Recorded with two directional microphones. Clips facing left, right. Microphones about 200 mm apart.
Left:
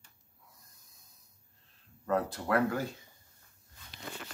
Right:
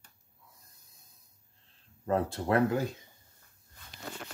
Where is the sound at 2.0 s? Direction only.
25° right (ahead or behind).